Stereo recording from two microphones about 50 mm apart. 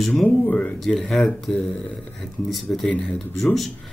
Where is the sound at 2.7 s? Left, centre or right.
Left.